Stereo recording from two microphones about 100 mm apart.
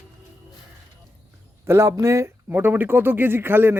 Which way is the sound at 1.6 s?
30° right (ahead or behind).